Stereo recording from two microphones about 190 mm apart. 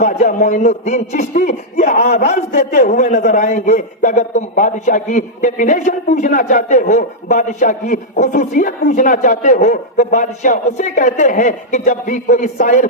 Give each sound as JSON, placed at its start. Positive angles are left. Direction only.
{"t": 0.0, "sound": "a man's voice", "side_deg": 45}